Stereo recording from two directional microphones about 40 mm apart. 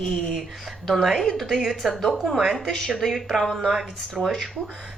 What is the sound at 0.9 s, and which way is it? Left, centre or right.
Speech, centre.